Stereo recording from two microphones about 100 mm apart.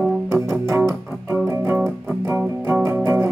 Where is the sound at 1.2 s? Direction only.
20° right (ahead or behind).